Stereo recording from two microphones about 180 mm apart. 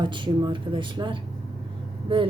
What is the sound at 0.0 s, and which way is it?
A woman's voice, 25° right (ahead or behind).